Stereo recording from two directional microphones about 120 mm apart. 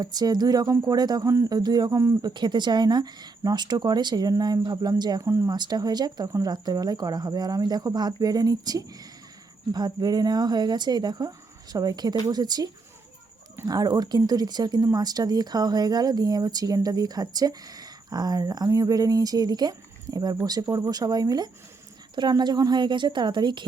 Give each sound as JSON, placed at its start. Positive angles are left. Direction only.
{"t": 0.0, "sound": "speech", "side_deg": -35}
{"t": 13.7, "sound": "speech", "side_deg": -35}